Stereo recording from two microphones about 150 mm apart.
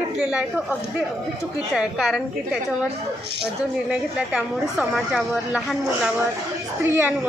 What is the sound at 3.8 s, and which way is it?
Speech, 5° right (ahead or behind).